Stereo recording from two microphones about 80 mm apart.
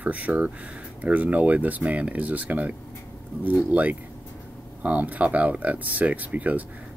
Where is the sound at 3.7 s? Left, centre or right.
Centre.